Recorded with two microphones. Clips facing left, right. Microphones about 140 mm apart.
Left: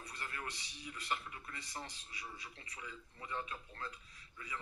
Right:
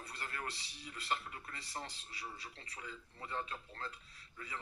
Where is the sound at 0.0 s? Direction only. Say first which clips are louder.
Right 1 dB; 35° right (ahead or behind).